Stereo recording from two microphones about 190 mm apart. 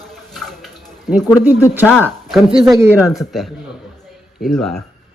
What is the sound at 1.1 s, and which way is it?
Speech, centre (ahead or behind).